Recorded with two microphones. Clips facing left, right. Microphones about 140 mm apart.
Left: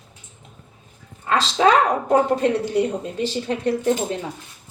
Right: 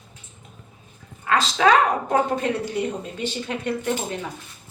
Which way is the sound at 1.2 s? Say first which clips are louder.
Left 1 dB; 30° left (ahead or behind).